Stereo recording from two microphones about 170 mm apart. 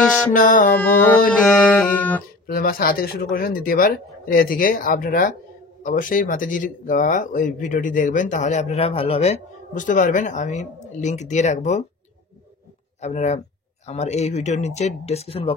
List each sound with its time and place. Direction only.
0.0 s music: centre (ahead or behind)
0.3 s speech: 50° left (ahead or behind)
0.7 s music: 10° left (ahead or behind)
2.4 s speech: 60° left (ahead or behind); by 11.8 s 45° left (ahead or behind)
13.0 s speech: 40° left (ahead or behind)